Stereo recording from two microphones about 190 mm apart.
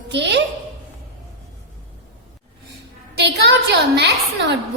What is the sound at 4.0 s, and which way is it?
Speech, 65° right (ahead or behind).